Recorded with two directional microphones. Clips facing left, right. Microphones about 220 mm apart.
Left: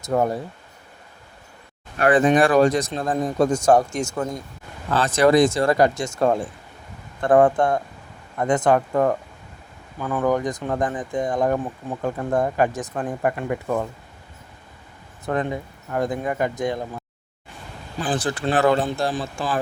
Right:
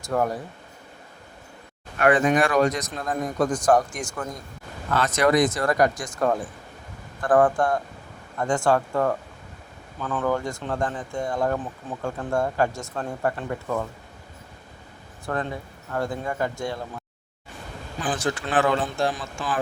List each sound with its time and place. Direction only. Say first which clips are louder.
0.0 s a man's voice: left 3 dB; 20° left (ahead or behind)
2.0 s a man's voice: left 3 dB; 35° left (ahead or behind); by 13.8 s 15° left (ahead or behind)
15.3 s a man's voice: left 4 dB; 20° left (ahead or behind)
18.0 s speech: left 3 dB; 35° left (ahead or behind)